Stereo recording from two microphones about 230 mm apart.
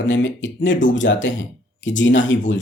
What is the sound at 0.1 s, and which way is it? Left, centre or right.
Speech, left.